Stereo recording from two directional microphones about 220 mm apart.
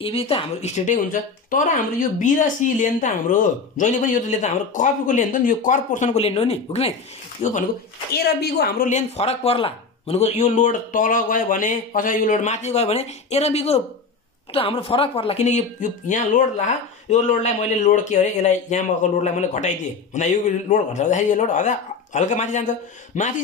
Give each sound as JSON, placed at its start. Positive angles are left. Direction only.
{"t": 0.0, "sound": "speech", "side_deg": 25}
{"t": 8.1, "sound": "speech", "side_deg": 45}